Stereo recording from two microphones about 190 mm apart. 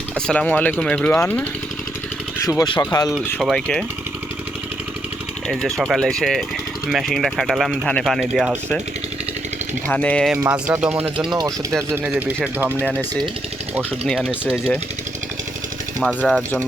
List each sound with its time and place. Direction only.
0.3 s speech: 5° left (ahead or behind)
2.5 s speech: 20° left (ahead or behind)
3.4 s speech: centre (ahead or behind)
5.5 s speech: centre (ahead or behind)
9.8 s speech: 10° left (ahead or behind)
10.3 s speech: 10° right (ahead or behind)
16.0 s speech: 5° left (ahead or behind)